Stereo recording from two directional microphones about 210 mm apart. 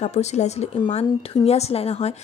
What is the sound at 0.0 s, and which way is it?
A woman's voice, 30° left (ahead or behind).